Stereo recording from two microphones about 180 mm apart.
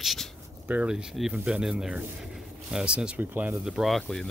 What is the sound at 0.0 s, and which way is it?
Speech, centre (ahead or behind).